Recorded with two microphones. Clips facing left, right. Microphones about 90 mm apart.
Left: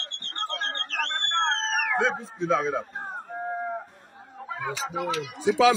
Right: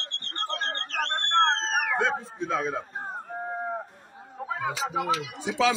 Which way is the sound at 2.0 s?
20° left (ahead or behind).